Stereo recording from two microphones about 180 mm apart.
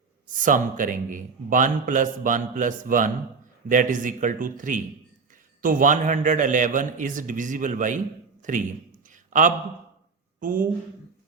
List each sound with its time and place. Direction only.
0.3 s a man's voice: 45° right (ahead or behind)
9.0 s a sound: 45° right (ahead or behind)
10.4 s a man's voice: 50° right (ahead or behind)